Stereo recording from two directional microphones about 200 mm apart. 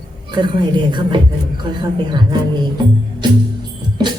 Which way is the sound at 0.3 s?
25° right (ahead or behind).